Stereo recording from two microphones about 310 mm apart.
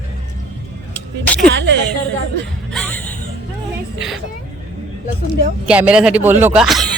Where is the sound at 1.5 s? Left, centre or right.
Right.